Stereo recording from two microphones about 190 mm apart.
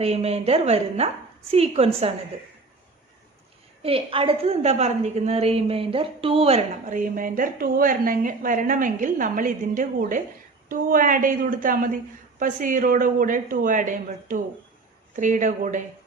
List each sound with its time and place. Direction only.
0.0 s a woman's voice: 30° right (ahead or behind)
3.8 s a woman's voice: 30° right (ahead or behind)